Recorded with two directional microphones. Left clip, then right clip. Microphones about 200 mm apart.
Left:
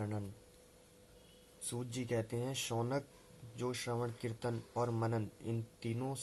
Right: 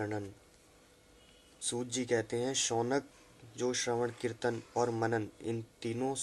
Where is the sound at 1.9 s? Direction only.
20° right (ahead or behind).